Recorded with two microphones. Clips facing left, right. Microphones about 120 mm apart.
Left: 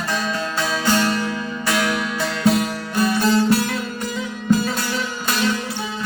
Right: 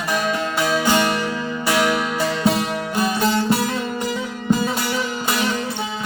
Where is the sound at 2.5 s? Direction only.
20° right (ahead or behind).